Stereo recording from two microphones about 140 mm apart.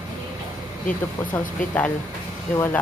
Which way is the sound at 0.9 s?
10° left (ahead or behind).